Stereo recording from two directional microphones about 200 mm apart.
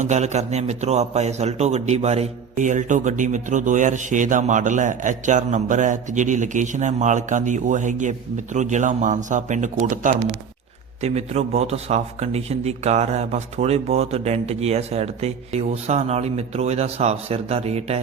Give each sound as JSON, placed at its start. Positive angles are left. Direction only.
{"t": 0.0, "sound": "a man's voice", "side_deg": -35}